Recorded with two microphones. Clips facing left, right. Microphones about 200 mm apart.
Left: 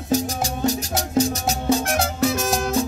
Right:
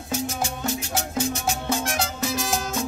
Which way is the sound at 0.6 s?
35° left (ahead or behind).